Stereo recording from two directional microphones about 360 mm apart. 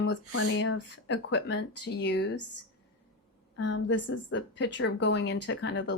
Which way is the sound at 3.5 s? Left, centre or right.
Left.